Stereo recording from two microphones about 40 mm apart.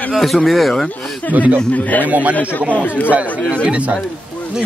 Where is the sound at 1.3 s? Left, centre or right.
Right.